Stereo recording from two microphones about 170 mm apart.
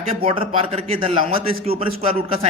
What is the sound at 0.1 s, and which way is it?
Speech, 35° right (ahead or behind).